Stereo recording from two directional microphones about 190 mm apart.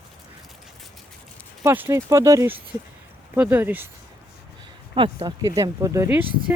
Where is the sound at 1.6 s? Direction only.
10° right (ahead or behind).